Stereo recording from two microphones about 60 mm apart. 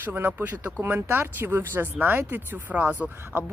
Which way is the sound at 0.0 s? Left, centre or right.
Right.